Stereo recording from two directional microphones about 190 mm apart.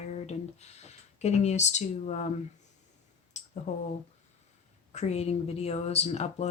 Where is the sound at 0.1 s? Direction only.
35° left (ahead or behind).